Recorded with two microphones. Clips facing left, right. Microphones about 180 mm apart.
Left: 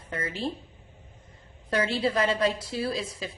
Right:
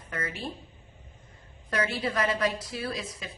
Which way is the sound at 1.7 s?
30° left (ahead or behind).